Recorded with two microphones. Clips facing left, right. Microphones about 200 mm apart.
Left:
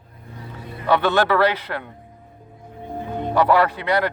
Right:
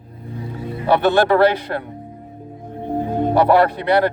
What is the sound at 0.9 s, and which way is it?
Speech, 40° right (ahead or behind).